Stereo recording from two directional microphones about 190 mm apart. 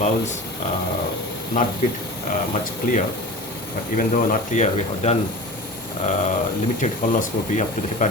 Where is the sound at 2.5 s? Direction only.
40° left (ahead or behind).